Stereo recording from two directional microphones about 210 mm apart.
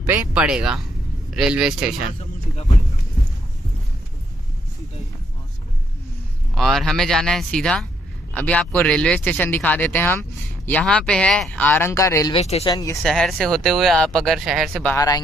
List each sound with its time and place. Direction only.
0.0 s speech: 10° right (ahead or behind)
6.5 s speech: centre (ahead or behind)
12.4 s speech: 30° left (ahead or behind)
12.7 s speech: 15° left (ahead or behind)
13.0 s speech: centre (ahead or behind)